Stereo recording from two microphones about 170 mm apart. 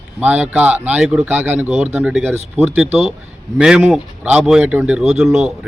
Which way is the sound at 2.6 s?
40° right (ahead or behind).